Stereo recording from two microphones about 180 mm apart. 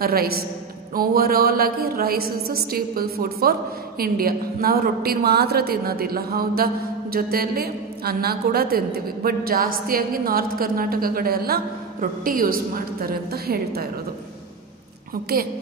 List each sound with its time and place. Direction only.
0.0 s a woman's voice: 55° right (ahead or behind)
15.3 s a woman's voice: 55° right (ahead or behind)